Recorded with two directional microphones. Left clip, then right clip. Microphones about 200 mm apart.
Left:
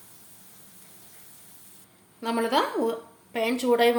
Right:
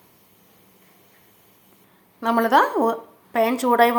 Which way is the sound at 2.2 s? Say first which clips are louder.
Right 8 dB; 15° right (ahead or behind).